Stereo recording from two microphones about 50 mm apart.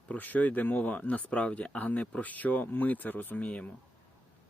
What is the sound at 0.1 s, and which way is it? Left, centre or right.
Speech, left.